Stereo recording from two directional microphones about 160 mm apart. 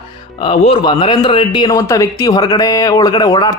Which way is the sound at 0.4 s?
35° left (ahead or behind).